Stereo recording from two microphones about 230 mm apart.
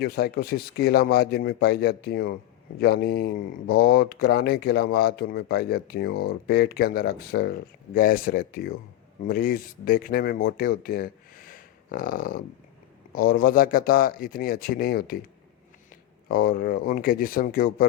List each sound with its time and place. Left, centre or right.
0.0 s speech: left
16.3 s speech: left